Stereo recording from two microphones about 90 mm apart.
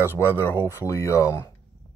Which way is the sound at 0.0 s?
25° left (ahead or behind).